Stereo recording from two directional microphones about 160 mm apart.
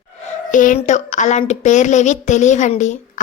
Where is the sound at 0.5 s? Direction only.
55° left (ahead or behind).